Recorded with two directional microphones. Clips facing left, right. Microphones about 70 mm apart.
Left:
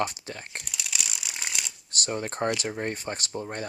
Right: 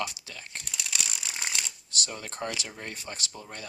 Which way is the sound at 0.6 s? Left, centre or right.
Centre.